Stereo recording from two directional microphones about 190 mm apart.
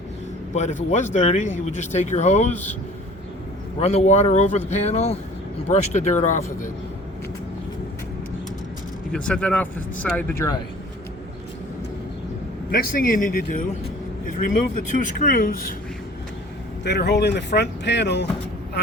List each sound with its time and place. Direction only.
0.5 s speech: 40° left (ahead or behind)
3.8 s speech: 35° left (ahead or behind)
9.1 s speech: 5° left (ahead or behind)
12.7 s speech: 45° left (ahead or behind)
14.9 s speech: 45° left (ahead or behind)
16.8 s speech: 60° left (ahead or behind)